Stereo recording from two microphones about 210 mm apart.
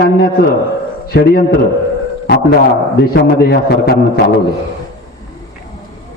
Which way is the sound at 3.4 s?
50° left (ahead or behind).